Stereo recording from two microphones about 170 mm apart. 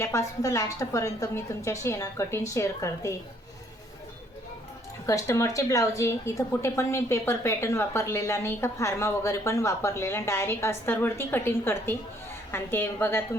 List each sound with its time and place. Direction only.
0.0 s a woman's voice: 15° left (ahead or behind)
5.0 s a woman's voice: 20° left (ahead or behind)